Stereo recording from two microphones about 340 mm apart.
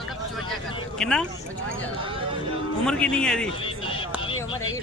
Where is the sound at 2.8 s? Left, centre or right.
Centre.